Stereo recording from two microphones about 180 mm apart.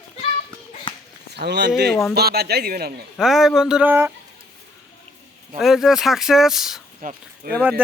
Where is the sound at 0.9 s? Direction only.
30° left (ahead or behind).